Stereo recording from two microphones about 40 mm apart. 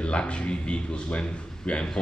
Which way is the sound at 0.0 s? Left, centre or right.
Left.